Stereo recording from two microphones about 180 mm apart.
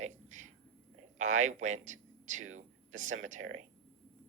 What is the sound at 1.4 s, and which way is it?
Speech, 40° right (ahead or behind).